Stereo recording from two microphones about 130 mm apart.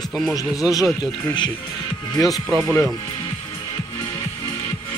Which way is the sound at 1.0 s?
35° left (ahead or behind).